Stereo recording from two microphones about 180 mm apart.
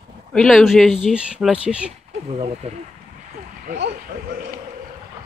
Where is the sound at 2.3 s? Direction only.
35° right (ahead or behind).